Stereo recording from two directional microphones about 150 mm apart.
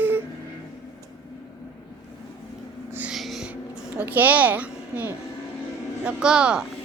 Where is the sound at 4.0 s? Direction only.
10° right (ahead or behind).